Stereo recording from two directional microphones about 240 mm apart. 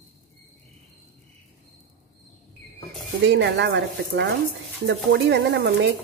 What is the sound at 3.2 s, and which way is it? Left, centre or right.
Speech, right.